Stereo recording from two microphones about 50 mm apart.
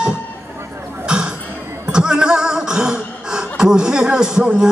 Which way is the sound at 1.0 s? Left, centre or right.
Centre.